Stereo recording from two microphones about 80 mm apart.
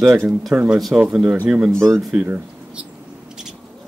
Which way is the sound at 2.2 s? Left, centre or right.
Right.